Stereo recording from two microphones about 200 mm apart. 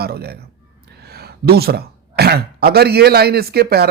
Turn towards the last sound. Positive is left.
turn(degrees=-55)  # may be behind; listen again after turning